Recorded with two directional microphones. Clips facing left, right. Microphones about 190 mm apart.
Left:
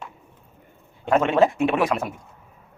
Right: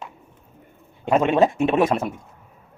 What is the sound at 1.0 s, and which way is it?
A man's voice, 15° right (ahead or behind).